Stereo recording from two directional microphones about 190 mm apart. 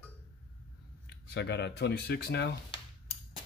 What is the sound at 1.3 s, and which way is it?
Speech, 60° left (ahead or behind).